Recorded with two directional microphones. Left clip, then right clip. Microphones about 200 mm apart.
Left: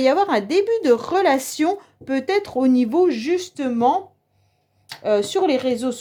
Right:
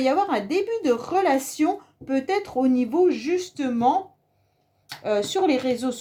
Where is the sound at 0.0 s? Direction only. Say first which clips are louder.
Left 4 dB; 40° left (ahead or behind).